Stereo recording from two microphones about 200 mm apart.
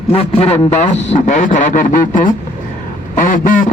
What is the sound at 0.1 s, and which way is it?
A man's voice, 30° left (ahead or behind).